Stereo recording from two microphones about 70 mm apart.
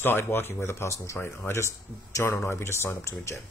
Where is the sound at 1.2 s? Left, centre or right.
Left.